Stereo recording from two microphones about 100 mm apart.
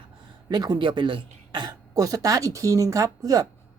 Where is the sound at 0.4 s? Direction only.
40° right (ahead or behind).